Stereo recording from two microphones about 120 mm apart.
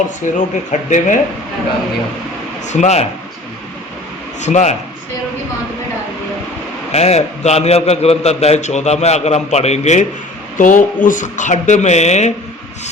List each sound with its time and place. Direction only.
0.3 s speech: 90° left
2.6 s speech: 75° left (ahead or behind)
4.4 s speech: 80° left
6.9 s a man's voice: 65° left (ahead or behind)
10.6 s speech: 90° left; by 12.3 s 70° left (ahead or behind)